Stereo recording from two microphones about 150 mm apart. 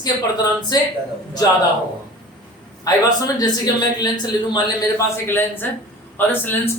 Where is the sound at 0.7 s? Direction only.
25° left (ahead or behind).